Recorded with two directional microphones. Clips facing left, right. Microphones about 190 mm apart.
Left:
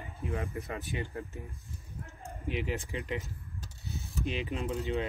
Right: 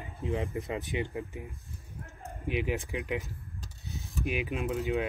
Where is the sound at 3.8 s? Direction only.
15° right (ahead or behind).